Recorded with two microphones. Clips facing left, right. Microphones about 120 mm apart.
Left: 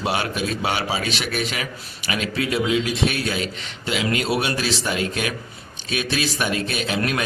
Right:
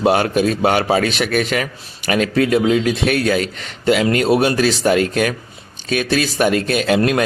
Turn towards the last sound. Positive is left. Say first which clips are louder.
# right 8 dB
turn(degrees=-50)  # may be behind; listen again after turning